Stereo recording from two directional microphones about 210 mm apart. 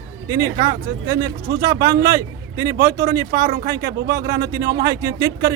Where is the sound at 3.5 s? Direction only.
45° right (ahead or behind).